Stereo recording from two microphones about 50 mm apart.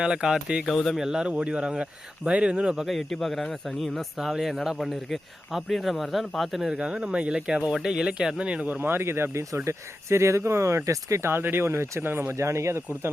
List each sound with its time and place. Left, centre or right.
0.0 s speech: centre
0.6 s speech: centre
0.9 s speech: centre
2.7 s speech: centre
6.7 s speech: right
8.8 s speech: right
9.6 s speech: right
11.3 s speech: right
12.3 s speech: right